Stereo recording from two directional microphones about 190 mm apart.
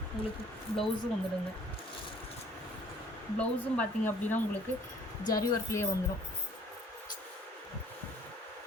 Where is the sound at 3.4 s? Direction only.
5° left (ahead or behind).